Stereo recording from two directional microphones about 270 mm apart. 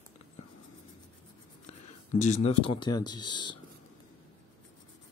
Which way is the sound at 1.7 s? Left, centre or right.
Left.